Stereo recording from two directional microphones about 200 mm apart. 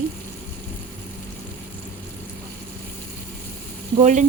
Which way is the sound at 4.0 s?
40° right (ahead or behind).